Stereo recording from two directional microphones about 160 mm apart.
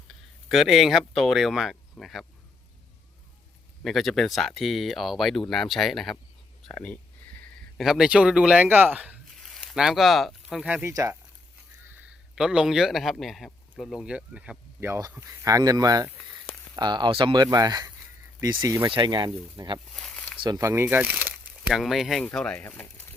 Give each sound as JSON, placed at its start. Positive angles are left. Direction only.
{"t": 0.4, "sound": "speech", "side_deg": 0}
{"t": 3.8, "sound": "speech", "side_deg": 0}
{"t": 6.7, "sound": "a sound", "side_deg": 10}
{"t": 7.8, "sound": "speech", "side_deg": -5}
{"t": 10.8, "sound": "speech", "side_deg": -20}
{"t": 11.9, "sound": "a man's voice", "side_deg": -5}
{"t": 19.9, "sound": "a sound", "side_deg": 5}
{"t": 20.4, "sound": "a man's voice", "side_deg": -20}
{"t": 21.7, "sound": "speech", "side_deg": 0}